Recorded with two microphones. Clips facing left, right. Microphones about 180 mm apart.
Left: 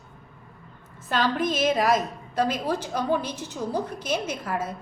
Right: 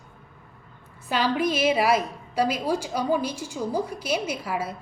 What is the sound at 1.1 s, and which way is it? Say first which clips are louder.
A woman's voice: right 1 dB; 10° right (ahead or behind).